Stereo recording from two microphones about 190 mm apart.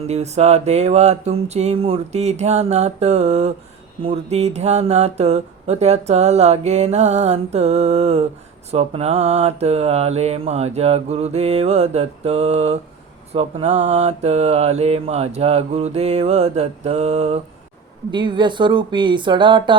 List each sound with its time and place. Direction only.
0.1 s speech: 35° right (ahead or behind)
18.1 s speech: 25° right (ahead or behind)